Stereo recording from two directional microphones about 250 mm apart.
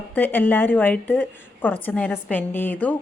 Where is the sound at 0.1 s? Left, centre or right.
Centre.